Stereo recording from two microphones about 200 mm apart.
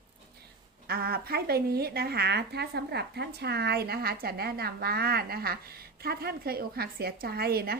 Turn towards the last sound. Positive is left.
turn(degrees=-50)  # may be behind; listen again after turning